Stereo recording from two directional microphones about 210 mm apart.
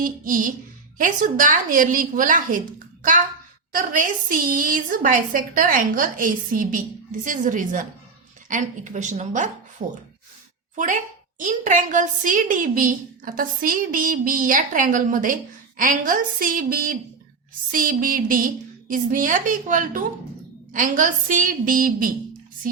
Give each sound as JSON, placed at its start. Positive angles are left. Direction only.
{"t": 0.0, "sound": "a woman's voice", "side_deg": -40}
{"t": 10.8, "sound": "a woman's voice", "side_deg": -35}